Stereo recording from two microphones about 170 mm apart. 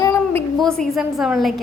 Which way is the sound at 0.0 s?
20° left (ahead or behind).